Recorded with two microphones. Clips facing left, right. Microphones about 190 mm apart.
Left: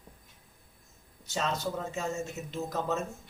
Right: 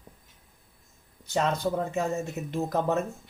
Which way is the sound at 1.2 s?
55° right (ahead or behind).